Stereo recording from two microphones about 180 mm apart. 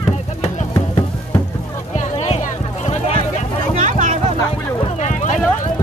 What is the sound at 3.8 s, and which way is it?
Music, 45° right (ahead or behind).